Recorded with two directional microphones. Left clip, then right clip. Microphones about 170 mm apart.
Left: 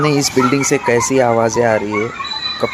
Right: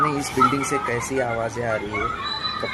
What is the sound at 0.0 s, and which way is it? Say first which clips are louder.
Speech: left 5 dB; 60° left (ahead or behind).